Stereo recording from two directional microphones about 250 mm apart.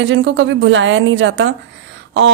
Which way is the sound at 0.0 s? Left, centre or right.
Right.